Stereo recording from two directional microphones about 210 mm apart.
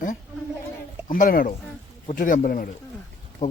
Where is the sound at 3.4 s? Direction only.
35° left (ahead or behind).